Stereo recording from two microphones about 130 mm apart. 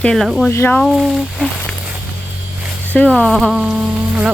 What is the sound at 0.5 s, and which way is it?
Speech, 20° left (ahead or behind).